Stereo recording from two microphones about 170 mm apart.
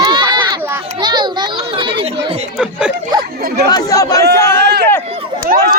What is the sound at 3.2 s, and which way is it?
Speech, 60° right (ahead or behind).